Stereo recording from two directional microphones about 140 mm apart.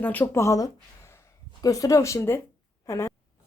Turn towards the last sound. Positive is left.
turn(degrees=20)  # may be behind; listen again after turning